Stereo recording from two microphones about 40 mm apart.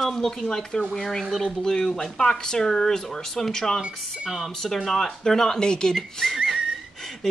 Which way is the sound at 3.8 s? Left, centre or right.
Right.